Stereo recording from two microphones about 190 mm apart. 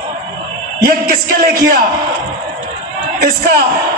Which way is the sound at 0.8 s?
50° right (ahead or behind).